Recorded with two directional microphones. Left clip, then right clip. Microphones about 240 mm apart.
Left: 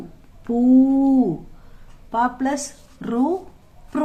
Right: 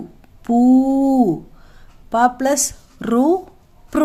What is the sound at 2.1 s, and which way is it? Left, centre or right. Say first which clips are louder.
Speech: right 6 dB; right.